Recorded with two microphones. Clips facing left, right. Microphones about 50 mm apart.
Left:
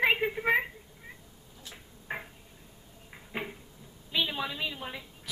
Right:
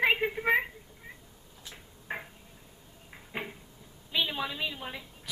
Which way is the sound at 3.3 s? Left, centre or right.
Centre.